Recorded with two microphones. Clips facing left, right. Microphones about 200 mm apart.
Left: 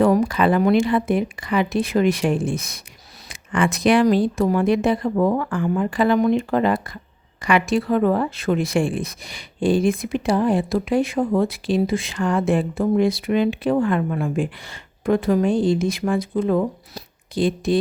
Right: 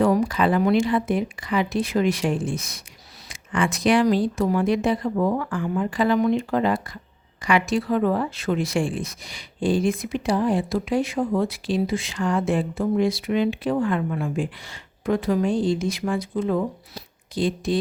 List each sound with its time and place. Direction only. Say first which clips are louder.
0.0 s speech: left 3 dB; 60° left (ahead or behind)